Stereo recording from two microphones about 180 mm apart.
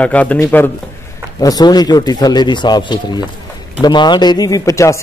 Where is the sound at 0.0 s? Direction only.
10° left (ahead or behind).